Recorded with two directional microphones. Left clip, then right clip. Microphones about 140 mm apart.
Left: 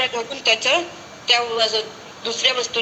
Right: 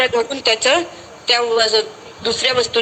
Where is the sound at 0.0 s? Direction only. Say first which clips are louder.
Right 5 dB; 55° right (ahead or behind).